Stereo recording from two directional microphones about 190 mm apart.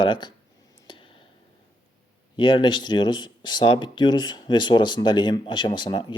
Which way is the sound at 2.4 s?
25° left (ahead or behind).